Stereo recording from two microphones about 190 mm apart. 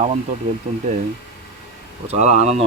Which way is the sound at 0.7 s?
45° right (ahead or behind).